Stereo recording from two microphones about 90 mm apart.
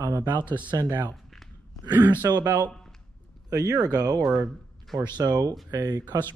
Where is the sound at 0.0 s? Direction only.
45° right (ahead or behind).